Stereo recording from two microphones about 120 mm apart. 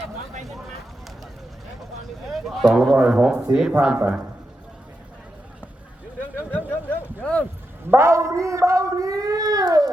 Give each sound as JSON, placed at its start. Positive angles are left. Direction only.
{"t": 2.2, "sound": "a man's voice", "side_deg": 0}
{"t": 6.7, "sound": "a sound", "side_deg": 15}
{"t": 7.9, "sound": "a man's voice", "side_deg": -25}